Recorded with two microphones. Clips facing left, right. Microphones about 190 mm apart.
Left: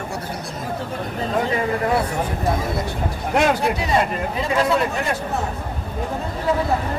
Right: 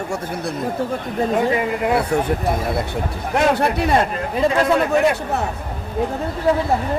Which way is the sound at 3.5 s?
60° right (ahead or behind).